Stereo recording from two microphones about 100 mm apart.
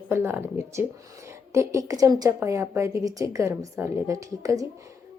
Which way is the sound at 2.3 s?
25° right (ahead or behind).